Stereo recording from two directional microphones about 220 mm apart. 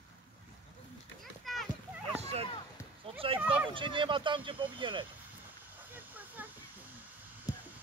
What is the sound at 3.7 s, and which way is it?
Speech, 20° right (ahead or behind).